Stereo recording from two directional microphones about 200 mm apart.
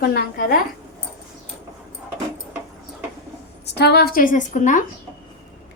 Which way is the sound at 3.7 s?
55° left (ahead or behind).